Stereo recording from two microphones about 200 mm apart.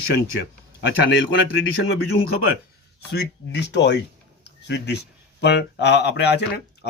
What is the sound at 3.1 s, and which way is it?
A man's voice, 60° left (ahead or behind).